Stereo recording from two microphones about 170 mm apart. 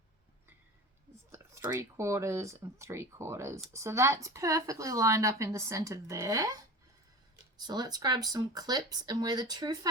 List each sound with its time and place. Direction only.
1.1 s speech: 15° right (ahead or behind)